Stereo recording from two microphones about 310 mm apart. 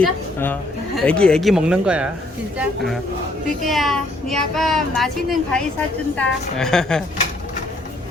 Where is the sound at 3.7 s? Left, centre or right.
Centre.